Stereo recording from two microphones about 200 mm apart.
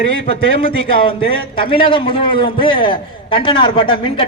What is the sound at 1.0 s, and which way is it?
A man's voice, 25° left (ahead or behind).